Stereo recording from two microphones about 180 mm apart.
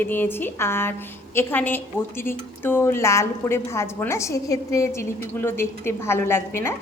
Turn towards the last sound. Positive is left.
turn(degrees=15)  # may be behind; listen again after turning